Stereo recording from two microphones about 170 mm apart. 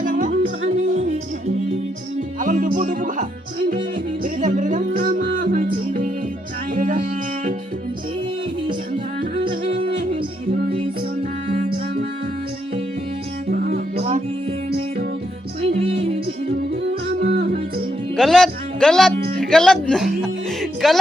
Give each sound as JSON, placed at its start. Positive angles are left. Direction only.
{"t": 0.0, "sound": "music", "side_deg": -50}
{"t": 2.4, "sound": "speech", "side_deg": -50}
{"t": 3.9, "sound": "music", "side_deg": -50}
{"t": 9.3, "sound": "yodeling", "side_deg": -30}
{"t": 9.7, "sound": "music", "side_deg": -30}
{"t": 10.8, "sound": "music", "side_deg": -50}
{"t": 13.5, "sound": "music", "side_deg": -60}
{"t": 15.7, "sound": "music", "side_deg": -40}
{"t": 16.5, "sound": "music", "side_deg": -60}
{"t": 18.2, "sound": "music", "side_deg": 0}